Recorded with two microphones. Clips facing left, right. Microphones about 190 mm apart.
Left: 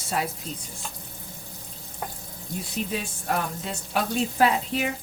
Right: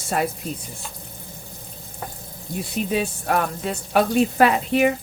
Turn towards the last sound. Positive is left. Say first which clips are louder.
# right 6 dB
turn(degrees=-65)  # may be behind; listen again after turning